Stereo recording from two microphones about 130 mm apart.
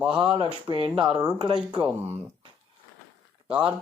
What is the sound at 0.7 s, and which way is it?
Speech, 40° right (ahead or behind).